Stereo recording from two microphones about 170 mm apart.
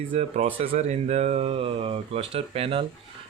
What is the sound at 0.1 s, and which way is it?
Speech, 40° right (ahead or behind).